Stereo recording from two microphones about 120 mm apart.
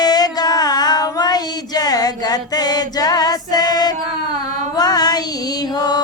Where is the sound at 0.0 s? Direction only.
35° left (ahead or behind).